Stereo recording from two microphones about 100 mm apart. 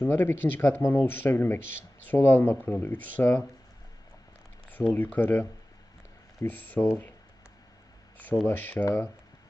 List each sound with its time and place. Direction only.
0.0 s speech: 20° left (ahead or behind)
4.9 s speech: 20° left (ahead or behind)
8.4 s speech: 20° left (ahead or behind)